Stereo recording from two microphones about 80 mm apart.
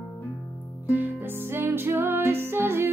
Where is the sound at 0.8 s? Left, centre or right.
Right.